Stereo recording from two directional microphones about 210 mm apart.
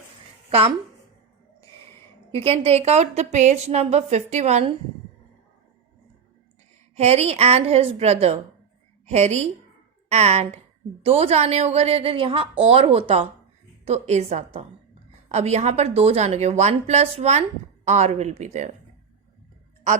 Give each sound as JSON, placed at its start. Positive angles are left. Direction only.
{"t": 2.3, "sound": "a woman's voice", "side_deg": -30}
{"t": 6.9, "sound": "a woman's voice", "side_deg": -30}